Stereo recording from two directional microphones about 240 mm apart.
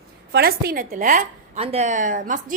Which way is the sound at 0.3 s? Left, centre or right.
Right.